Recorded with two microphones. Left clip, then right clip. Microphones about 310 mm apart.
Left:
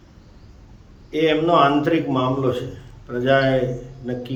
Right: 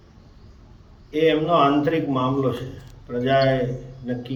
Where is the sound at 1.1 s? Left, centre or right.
Centre.